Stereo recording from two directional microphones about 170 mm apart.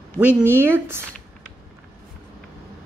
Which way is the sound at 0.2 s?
10° right (ahead or behind).